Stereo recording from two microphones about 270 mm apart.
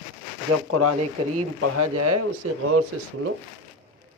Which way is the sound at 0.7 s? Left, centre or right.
Right.